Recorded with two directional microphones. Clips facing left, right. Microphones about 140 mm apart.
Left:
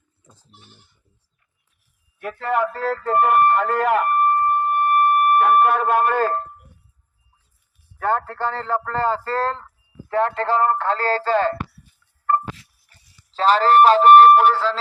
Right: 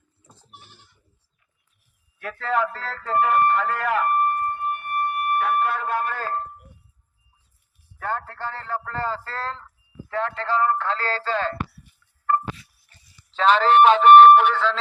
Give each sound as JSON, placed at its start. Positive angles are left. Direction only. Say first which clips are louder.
{"t": 2.1, "sound": "speech", "louder": "left 2 dB", "side_deg": 15}
{"t": 3.0, "sound": "speech", "louder": "left 3 dB", "side_deg": 55}
{"t": 4.6, "sound": "a sound", "louder": "left 8 dB", "side_deg": 55}
{"t": 7.9, "sound": "speech", "louder": "left 7 dB", "side_deg": 70}
{"t": 8.8, "sound": "speech", "louder": "left 6 dB", "side_deg": 65}
{"t": 13.3, "sound": "speech", "louder": "left 2 dB", "side_deg": 40}